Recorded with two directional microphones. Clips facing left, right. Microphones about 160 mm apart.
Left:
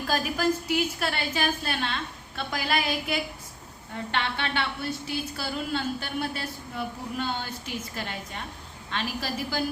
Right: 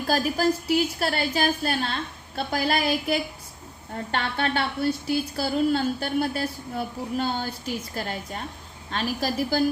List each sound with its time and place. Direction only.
0.1 s a woman's voice: 35° right (ahead or behind)